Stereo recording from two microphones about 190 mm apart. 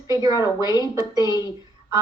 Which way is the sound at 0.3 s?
20° left (ahead or behind).